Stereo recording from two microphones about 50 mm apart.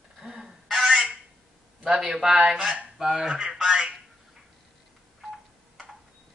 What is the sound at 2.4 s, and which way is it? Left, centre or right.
Speech, right.